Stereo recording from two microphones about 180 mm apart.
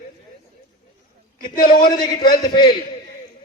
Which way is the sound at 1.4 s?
55° left (ahead or behind).